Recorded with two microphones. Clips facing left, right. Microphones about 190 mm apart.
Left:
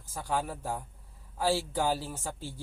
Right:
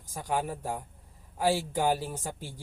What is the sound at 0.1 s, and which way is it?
Speech, 15° right (ahead or behind).